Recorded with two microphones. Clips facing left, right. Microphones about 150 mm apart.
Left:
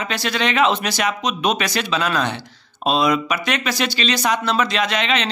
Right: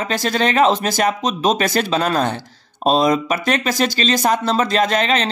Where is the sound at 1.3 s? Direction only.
30° right (ahead or behind).